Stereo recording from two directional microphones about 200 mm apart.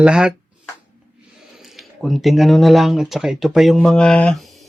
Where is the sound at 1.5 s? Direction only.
Centre (ahead or behind).